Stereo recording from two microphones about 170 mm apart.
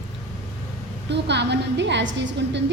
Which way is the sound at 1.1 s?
90° right.